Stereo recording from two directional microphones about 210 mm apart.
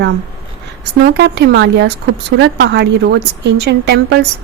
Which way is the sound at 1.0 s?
55° right (ahead or behind).